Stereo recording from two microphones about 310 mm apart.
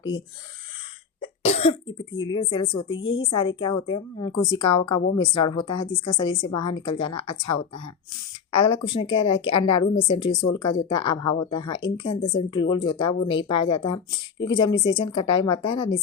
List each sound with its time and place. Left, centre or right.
1.2 s cough: centre
2.1 s a woman's voice: centre
2.9 s a woman's voice: left
3.2 s a woman's voice: centre
8.5 s a woman's voice: centre